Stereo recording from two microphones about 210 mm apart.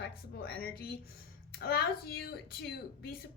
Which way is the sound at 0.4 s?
45° left (ahead or behind).